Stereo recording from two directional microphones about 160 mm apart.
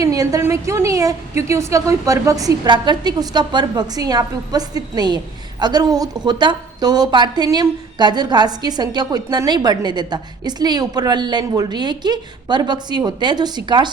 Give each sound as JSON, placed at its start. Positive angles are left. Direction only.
{"t": 0.0, "sound": "a woman's voice", "side_deg": -20}